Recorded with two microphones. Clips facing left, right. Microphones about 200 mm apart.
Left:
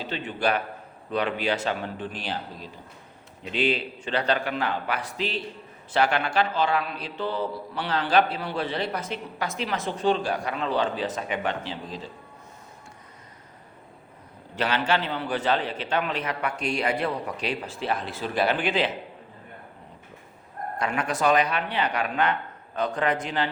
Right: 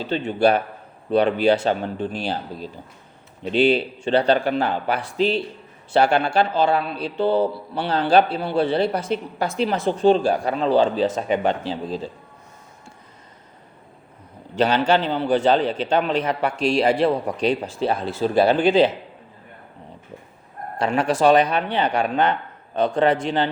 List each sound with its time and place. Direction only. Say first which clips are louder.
0.0 s a man's voice: right 8 dB; 30° right (ahead or behind)
14.5 s a man's voice: right 7 dB; 30° right (ahead or behind)
20.7 s speech: right 7 dB; 30° right (ahead or behind)